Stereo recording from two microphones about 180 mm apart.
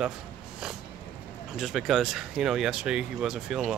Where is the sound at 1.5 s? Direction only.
Centre (ahead or behind).